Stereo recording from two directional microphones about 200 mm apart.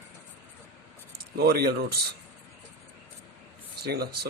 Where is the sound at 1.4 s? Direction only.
50° right (ahead or behind).